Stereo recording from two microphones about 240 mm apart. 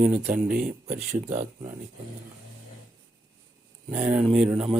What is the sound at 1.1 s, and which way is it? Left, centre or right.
Speech, right.